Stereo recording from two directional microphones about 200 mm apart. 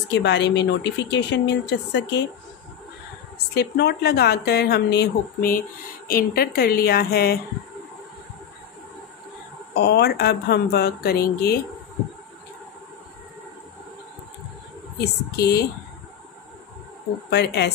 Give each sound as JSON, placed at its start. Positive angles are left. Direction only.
{"t": 0.1, "sound": "a woman's voice", "side_deg": 60}
{"t": 3.5, "sound": "speech", "side_deg": 55}
{"t": 9.8, "sound": "speech", "side_deg": 55}
{"t": 15.3, "sound": "a woman's voice", "side_deg": 55}
{"t": 17.3, "sound": "a woman's voice", "side_deg": 55}